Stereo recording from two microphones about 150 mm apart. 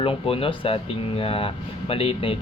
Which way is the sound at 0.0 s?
35° left (ahead or behind).